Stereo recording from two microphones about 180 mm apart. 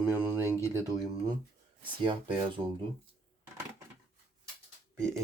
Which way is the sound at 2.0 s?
25° right (ahead or behind).